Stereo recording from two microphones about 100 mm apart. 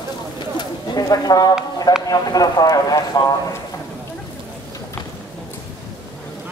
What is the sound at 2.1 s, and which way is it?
Speech, 40° left (ahead or behind).